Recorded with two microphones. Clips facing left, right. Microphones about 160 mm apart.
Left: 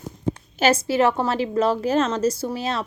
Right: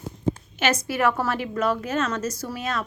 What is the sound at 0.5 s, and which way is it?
A woman's voice, 30° left (ahead or behind).